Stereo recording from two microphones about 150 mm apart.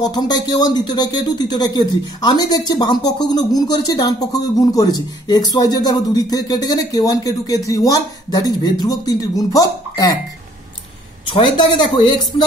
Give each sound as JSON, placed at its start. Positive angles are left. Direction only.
{"t": 0.0, "sound": "speech", "side_deg": 25}
{"t": 11.2, "sound": "a woman's voice", "side_deg": 30}